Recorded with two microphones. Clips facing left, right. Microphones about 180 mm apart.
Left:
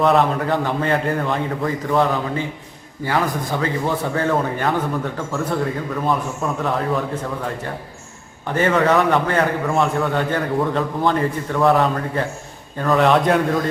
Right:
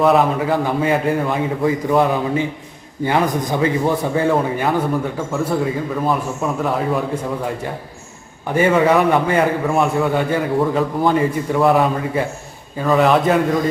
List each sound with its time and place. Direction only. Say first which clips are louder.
0.0 s a man's voice: right 2 dB; 5° right (ahead or behind)
8.4 s a man's voice: right 3 dB; 10° right (ahead or behind)